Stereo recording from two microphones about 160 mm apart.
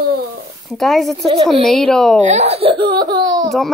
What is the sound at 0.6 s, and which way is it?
Speech, centre (ahead or behind).